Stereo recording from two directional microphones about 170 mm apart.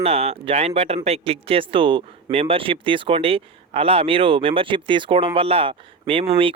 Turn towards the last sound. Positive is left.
turn(degrees=-35)  # may be behind; listen again after turning